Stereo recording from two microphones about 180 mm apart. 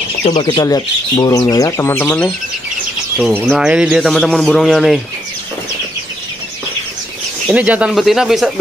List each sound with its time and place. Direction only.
0.2 s speech: 40° left (ahead or behind)
0.6 s speech: 20° left (ahead or behind)
3.2 s speech: 5° right (ahead or behind)
7.4 s speech: 10° right (ahead or behind)